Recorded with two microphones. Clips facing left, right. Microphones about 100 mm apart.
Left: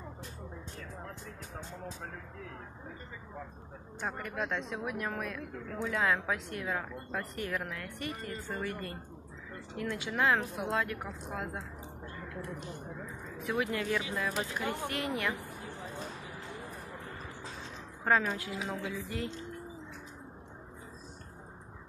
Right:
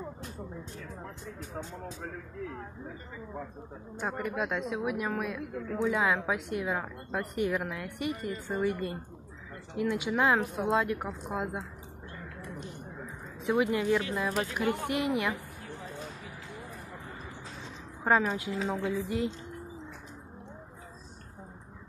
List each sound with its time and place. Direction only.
4.0 s a woman's voice: 10° right (ahead or behind)
13.5 s speech: 20° right (ahead or behind)
18.0 s a woman's voice: 20° right (ahead or behind)